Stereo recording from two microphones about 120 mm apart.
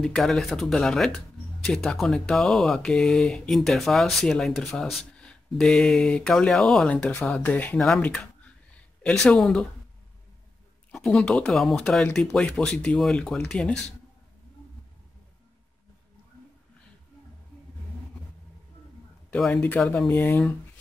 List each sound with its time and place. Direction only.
0.0 s speech: 5° left (ahead or behind)
10.9 s speech: 10° left (ahead or behind)
19.3 s speech: 15° left (ahead or behind)